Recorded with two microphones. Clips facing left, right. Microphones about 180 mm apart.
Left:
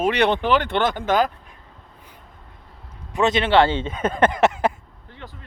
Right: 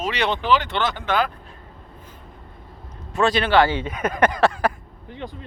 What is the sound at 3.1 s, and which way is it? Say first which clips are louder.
Speech: left 1 dB; 20° left (ahead or behind).